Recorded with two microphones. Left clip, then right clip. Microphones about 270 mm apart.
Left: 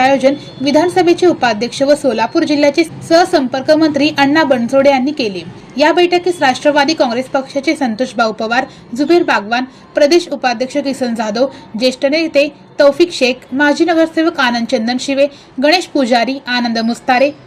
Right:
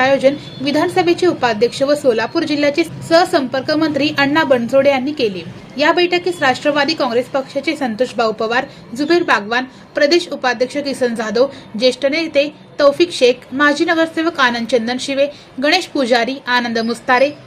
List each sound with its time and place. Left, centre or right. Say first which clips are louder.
0.0 s a woman's voice: left 2 dB; centre